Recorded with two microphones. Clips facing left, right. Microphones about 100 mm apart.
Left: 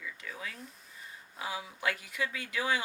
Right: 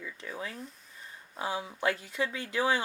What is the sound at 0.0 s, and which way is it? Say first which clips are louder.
Speech: right 3 dB; 30° right (ahead or behind).